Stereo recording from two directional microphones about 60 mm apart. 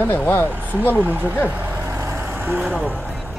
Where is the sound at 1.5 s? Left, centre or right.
Right.